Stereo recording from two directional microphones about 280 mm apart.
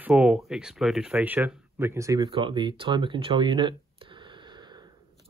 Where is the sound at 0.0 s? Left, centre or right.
Centre.